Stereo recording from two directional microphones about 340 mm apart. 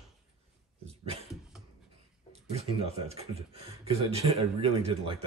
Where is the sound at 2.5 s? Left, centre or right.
Centre.